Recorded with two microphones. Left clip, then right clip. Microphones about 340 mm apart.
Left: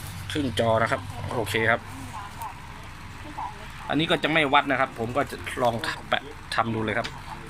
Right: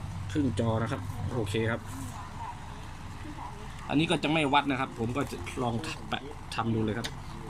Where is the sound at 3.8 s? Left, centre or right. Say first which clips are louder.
Left 4 dB; centre.